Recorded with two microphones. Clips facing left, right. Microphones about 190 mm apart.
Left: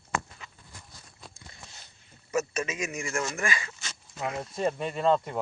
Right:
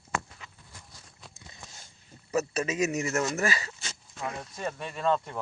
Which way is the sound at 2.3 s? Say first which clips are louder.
Right 1 dB; 35° right (ahead or behind).